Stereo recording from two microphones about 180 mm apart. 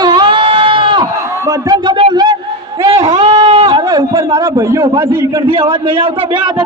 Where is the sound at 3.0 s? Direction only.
25° right (ahead or behind).